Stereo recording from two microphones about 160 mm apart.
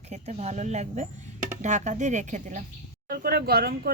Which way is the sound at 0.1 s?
40° right (ahead or behind).